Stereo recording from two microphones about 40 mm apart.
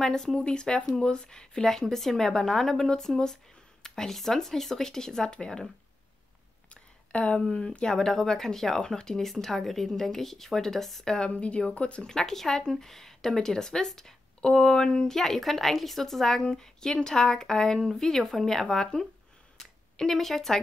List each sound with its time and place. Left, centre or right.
0.0 s a woman's voice: centre
6.7 s a sound: left
7.5 s speech: left
8.0 s a woman's voice: centre
11.1 s a woman's voice: centre
11.3 s speech: left
12.1 s a woman's voice: centre
15.1 s a woman's voice: centre